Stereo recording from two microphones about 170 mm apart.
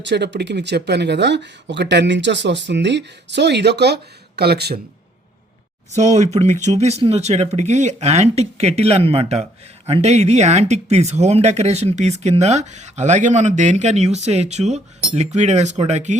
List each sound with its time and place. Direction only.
0.0 s speech: 90° right; by 4.8 s 70° right (ahead or behind)
5.9 s speech: 45° right (ahead or behind)